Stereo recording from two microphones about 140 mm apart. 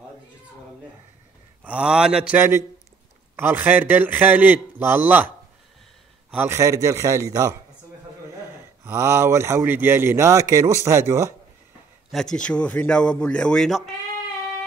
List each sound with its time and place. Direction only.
1.6 s a man's voice: 10° right (ahead or behind)
6.3 s a man's voice: 15° right (ahead or behind)
8.8 s a man's voice: 20° right (ahead or behind)
12.1 s a man's voice: 5° left (ahead or behind)